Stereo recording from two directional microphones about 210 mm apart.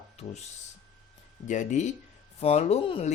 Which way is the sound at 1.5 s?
35° left (ahead or behind).